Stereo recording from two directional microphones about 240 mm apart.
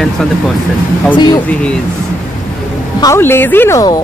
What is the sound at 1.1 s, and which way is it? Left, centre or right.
Speech, centre.